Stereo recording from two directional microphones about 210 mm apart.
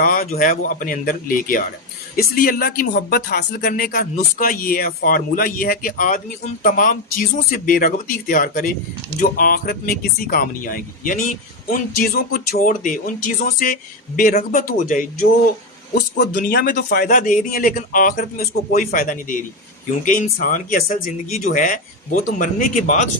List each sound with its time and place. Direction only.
0.0 s speech: 40° left (ahead or behind)
20.4 s speech: 40° left (ahead or behind)